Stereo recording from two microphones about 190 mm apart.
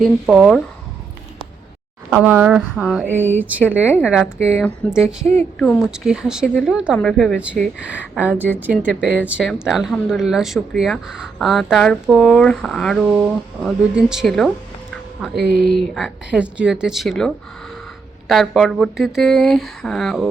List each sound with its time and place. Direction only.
0.0 s speech: centre (ahead or behind)
2.0 s speech: 10° right (ahead or behind)
15.4 s speech: 55° right (ahead or behind)
16.0 s speech: 5° right (ahead or behind)